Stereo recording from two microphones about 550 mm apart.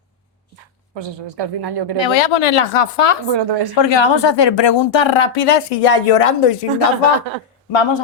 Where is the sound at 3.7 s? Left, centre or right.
Left.